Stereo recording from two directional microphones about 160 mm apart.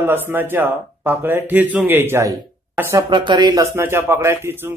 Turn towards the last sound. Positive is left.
turn(degrees=-15)  # may be behind; listen again after turning